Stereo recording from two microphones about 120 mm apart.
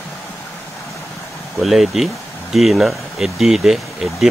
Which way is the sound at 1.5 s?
Centre (ahead or behind).